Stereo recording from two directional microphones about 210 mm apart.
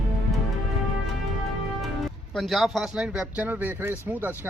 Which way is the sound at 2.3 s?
Centre (ahead or behind).